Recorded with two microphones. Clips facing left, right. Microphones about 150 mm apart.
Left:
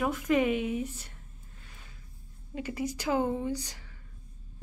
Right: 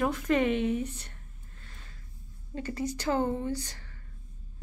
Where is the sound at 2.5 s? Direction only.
10° left (ahead or behind).